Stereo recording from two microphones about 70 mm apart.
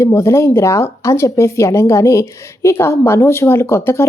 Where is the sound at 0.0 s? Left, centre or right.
Left.